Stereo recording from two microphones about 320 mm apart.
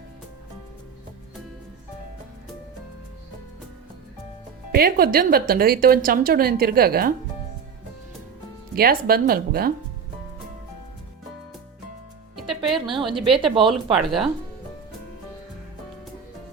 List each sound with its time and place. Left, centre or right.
4.7 s a woman's voice: right
8.7 s a woman's voice: right
12.4 s music: centre
12.9 s a woman's voice: centre
13.9 s speech: centre